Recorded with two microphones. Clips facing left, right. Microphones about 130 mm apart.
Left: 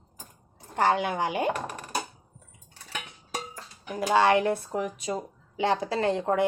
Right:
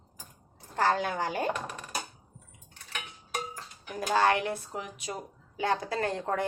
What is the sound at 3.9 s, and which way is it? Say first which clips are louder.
Speech: left 4 dB; 25° left (ahead or behind).